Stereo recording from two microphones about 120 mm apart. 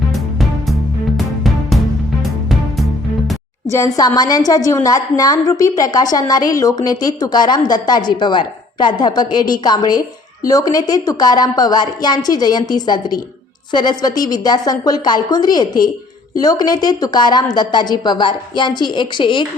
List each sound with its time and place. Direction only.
0.1 s music: centre (ahead or behind)
3.7 s a woman's voice: 30° left (ahead or behind)